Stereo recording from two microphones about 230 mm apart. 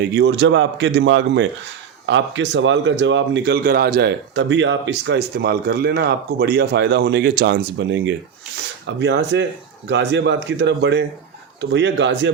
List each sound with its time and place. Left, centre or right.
0.0 s speech: right